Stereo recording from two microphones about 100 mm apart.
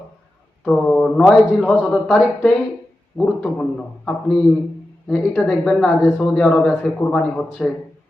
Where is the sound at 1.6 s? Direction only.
15° left (ahead or behind).